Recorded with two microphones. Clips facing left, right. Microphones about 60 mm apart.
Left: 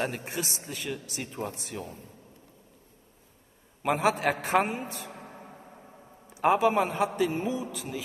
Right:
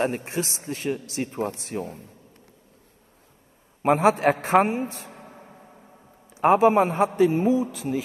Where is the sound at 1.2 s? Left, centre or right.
Right.